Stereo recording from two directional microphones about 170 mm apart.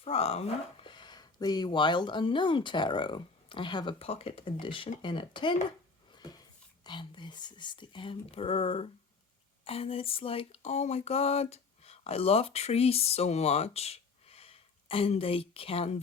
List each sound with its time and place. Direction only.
0.0 s speech: 35° left (ahead or behind)
6.1 s a sound: 25° left (ahead or behind)
6.8 s speech: 25° left (ahead or behind)